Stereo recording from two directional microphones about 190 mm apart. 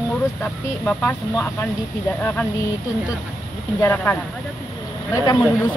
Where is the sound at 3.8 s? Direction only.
10° left (ahead or behind).